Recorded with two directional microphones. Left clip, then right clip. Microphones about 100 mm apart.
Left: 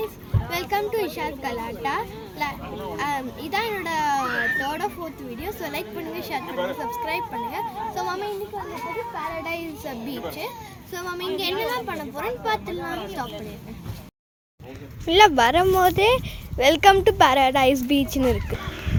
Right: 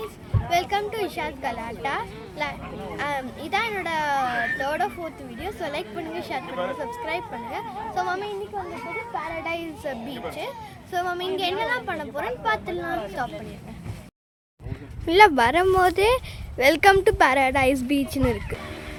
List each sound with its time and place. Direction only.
0.5 s speech: 40° right (ahead or behind)
5.4 s a woman's voice: 25° right (ahead or behind)
9.4 s a woman's voice: 25° right (ahead or behind)
15.0 s speech: 20° right (ahead or behind); by 18.7 s 25° left (ahead or behind)